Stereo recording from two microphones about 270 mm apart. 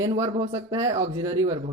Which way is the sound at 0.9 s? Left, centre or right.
Right.